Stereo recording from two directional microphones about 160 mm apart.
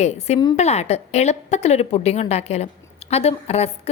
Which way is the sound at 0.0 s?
45° left (ahead or behind).